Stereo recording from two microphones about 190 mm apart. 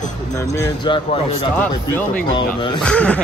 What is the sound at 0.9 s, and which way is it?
Speech, 30° left (ahead or behind).